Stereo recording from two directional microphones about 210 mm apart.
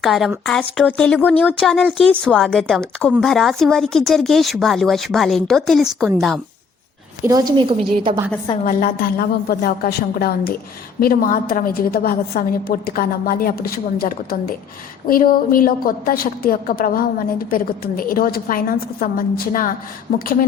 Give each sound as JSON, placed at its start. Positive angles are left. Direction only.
{"t": 0.0, "sound": "speech", "side_deg": 0}
{"t": 7.3, "sound": "a woman's voice", "side_deg": -20}
{"t": 8.6, "sound": "a woman's voice", "side_deg": 45}